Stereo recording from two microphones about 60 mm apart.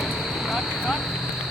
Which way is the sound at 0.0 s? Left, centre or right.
Centre.